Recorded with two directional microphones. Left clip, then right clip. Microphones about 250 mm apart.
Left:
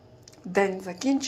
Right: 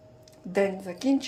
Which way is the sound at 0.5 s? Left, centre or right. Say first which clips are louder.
Left 1 dB; centre.